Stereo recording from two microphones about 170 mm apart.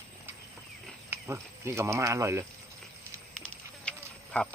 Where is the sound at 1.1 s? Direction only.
15° right (ahead or behind).